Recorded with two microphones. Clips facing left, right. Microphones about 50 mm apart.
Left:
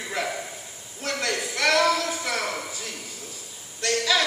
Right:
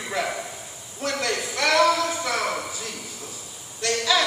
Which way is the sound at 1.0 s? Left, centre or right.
Centre.